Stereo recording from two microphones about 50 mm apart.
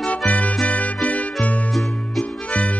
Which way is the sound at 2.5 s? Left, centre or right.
Left.